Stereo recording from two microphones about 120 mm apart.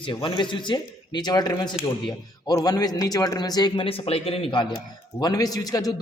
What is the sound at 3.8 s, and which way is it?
Speech, 50° left (ahead or behind).